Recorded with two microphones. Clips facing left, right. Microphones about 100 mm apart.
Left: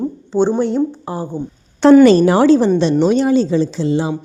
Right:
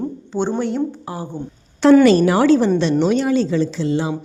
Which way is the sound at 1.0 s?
40° left (ahead or behind).